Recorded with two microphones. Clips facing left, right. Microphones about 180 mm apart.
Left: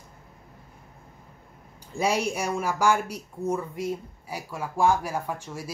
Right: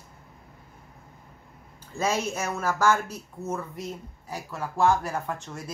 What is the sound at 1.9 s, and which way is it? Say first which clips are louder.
Speech: left 2 dB; 15° left (ahead or behind).